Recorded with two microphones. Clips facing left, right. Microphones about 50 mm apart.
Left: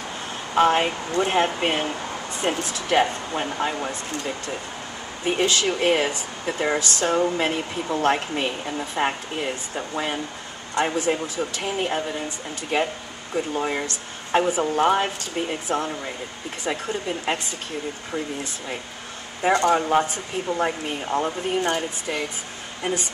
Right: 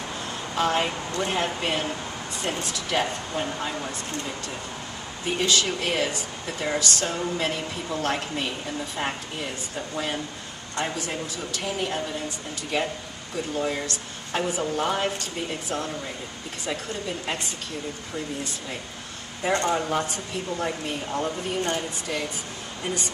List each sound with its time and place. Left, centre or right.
0.6 s speech: left
5.2 s speech: left